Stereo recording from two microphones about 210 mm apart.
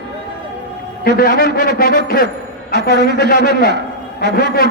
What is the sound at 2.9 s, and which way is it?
Speech, 55° right (ahead or behind).